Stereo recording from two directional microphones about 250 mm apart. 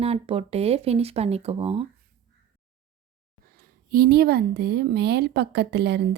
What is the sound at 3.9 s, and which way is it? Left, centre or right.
Speech, right.